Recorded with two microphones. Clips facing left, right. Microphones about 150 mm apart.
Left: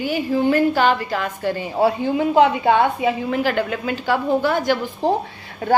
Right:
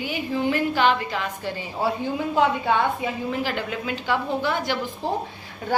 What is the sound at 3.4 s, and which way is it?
A woman's voice, 55° left (ahead or behind).